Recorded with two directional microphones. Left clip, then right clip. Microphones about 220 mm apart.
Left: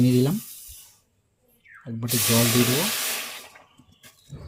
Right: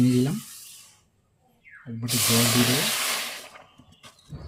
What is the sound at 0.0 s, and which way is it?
Speech, 25° left (ahead or behind).